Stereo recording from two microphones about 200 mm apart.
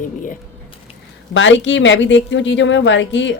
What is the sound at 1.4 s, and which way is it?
Speech, 65° left (ahead or behind).